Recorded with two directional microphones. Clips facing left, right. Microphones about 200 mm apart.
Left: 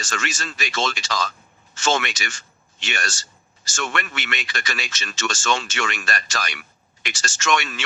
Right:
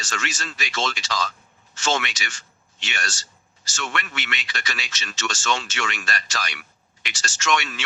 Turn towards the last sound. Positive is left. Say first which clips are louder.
# left 1 dB
turn(degrees=50)  # may be behind; listen again after turning